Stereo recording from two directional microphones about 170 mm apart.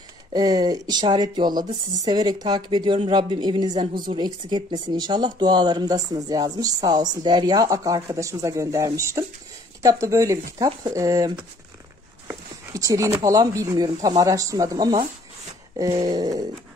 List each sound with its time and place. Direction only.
0.3 s speech: 25° right (ahead or behind)
12.3 s a sound: 20° right (ahead or behind)
13.2 s speech: 20° right (ahead or behind)